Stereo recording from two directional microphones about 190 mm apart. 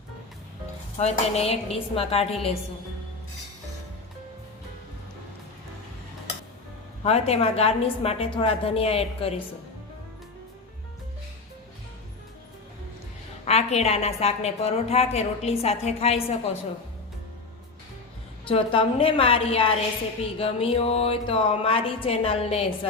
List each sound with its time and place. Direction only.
0.9 s a woman's voice: 35° left (ahead or behind)
7.0 s a woman's voice: 30° left (ahead or behind)
13.4 s a woman's voice: 35° left (ahead or behind)
18.4 s a woman's voice: 30° left (ahead or behind)